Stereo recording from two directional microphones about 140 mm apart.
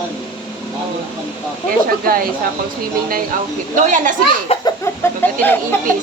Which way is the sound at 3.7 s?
65° right (ahead or behind).